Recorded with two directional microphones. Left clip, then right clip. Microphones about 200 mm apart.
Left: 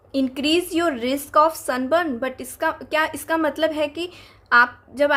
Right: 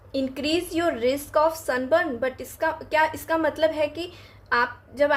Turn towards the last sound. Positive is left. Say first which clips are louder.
# left 5 dB
turn(degrees=30)  # may be behind; listen again after turning